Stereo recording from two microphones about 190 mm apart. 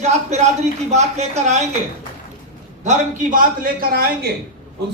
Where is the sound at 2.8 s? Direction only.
40° right (ahead or behind).